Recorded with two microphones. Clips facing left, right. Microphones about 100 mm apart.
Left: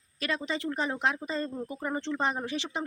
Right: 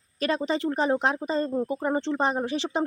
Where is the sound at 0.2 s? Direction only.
35° right (ahead or behind).